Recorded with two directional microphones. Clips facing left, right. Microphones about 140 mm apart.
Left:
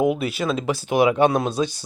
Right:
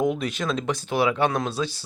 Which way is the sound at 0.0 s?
5° left (ahead or behind).